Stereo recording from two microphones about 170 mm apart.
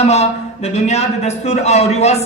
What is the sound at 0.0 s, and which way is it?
Speech, 40° left (ahead or behind).